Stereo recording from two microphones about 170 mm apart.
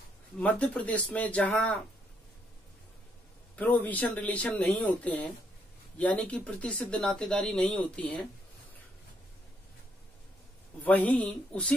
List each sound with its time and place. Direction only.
0.4 s speech: 10° left (ahead or behind)
3.5 s speech: 10° left (ahead or behind)
10.8 s speech: 10° left (ahead or behind)